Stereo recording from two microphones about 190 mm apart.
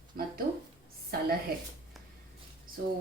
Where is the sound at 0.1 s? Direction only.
50° right (ahead or behind).